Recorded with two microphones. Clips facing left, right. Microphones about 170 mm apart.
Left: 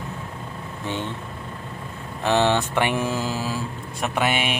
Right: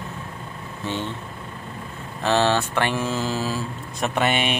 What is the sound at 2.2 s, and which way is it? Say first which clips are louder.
Speech: even; 15° left (ahead or behind).